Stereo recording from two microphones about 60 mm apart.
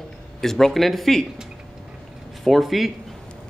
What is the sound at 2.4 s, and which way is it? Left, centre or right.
Speech, centre.